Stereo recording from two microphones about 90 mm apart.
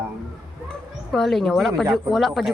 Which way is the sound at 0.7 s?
5° left (ahead or behind).